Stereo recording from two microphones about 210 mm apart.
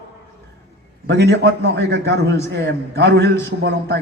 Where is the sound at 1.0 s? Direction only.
55° right (ahead or behind).